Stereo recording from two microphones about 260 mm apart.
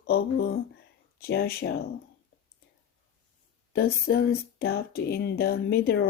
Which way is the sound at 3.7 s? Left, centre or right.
Left.